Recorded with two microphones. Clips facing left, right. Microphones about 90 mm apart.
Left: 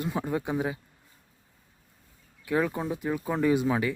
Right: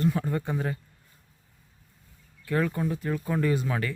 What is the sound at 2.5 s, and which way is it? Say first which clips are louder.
Speech: even; 15° left (ahead or behind).